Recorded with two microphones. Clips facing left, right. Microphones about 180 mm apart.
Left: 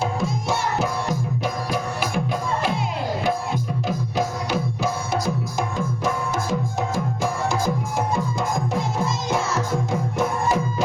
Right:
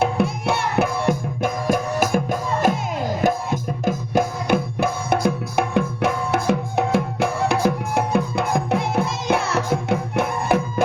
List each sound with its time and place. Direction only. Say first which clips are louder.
0.0 s music: right 4 dB; 60° right (ahead or behind)